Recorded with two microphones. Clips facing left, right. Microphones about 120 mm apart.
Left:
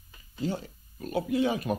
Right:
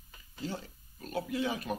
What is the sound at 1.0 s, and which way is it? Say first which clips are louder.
Speech: left 7 dB; 15° left (ahead or behind).